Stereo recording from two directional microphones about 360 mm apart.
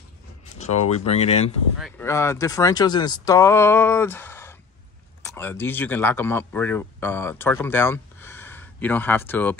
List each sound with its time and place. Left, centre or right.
0.9 s speech: centre
1.8 s speech: centre